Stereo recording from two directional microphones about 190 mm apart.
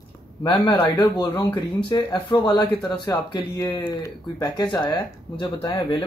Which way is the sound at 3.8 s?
20° left (ahead or behind).